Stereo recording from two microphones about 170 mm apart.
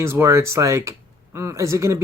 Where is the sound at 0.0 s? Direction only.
15° right (ahead or behind).